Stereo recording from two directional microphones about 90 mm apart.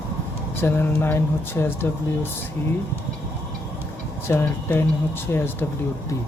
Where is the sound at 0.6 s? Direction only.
25° left (ahead or behind).